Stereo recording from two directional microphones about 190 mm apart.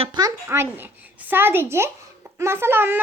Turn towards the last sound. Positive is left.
turn(degrees=-10)  # may be behind; listen again after turning